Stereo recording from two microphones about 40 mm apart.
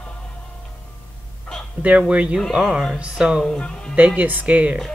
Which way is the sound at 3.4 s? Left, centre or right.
Left.